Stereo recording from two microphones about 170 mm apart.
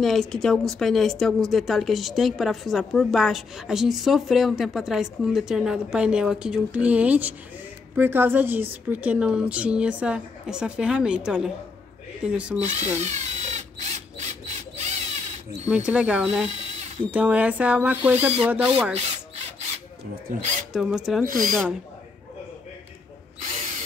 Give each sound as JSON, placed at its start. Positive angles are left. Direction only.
{"t": 0.0, "sound": "a woman's voice", "side_deg": 0}
{"t": 12.5, "sound": "speech", "side_deg": -40}
{"t": 13.0, "sound": "drill", "side_deg": -40}
{"t": 15.7, "sound": "speech", "side_deg": -5}
{"t": 16.4, "sound": "drill", "side_deg": -40}
{"t": 17.1, "sound": "speech", "side_deg": -10}
{"t": 20.7, "sound": "a woman's voice", "side_deg": 0}